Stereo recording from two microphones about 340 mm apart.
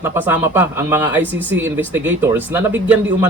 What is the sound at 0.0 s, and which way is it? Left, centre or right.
Speech, centre.